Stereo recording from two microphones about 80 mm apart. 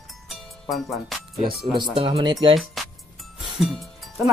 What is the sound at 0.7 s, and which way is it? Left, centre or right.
Speech, centre.